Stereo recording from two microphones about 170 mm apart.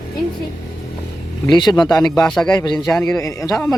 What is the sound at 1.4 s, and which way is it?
Speech, 25° left (ahead or behind).